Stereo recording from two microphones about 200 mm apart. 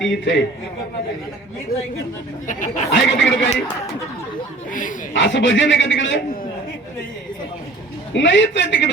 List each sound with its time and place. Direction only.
0.0 s a man's voice: 65° left (ahead or behind)
1.7 s speech: 45° left (ahead or behind)
2.9 s a man's voice: 70° left (ahead or behind)
4.7 s speech: 40° left (ahead or behind)
5.1 s a man's voice: 65° left (ahead or behind)
8.1 s a man's voice: 65° left (ahead or behind)